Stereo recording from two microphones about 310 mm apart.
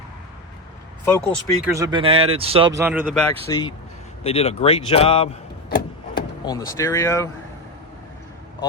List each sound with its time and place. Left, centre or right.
1.0 s speech: centre
1.6 s speech: centre
3.5 s speech: centre